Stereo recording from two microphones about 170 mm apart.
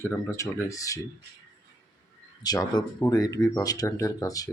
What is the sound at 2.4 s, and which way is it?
Speech, 20° left (ahead or behind).